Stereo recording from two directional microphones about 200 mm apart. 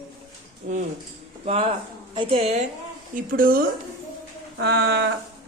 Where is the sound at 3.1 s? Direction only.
45° right (ahead or behind).